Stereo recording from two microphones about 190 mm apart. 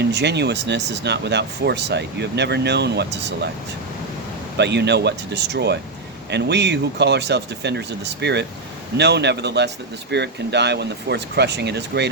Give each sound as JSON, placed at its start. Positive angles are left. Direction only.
{"t": 0.0, "sound": "speech", "side_deg": -65}
{"t": 4.5, "sound": "speech", "side_deg": -60}